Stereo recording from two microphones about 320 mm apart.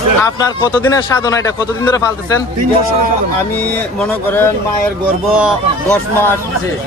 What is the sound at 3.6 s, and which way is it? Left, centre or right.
A man's voice, centre.